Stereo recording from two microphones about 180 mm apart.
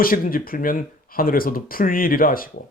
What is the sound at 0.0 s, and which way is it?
Speech, 50° left (ahead or behind).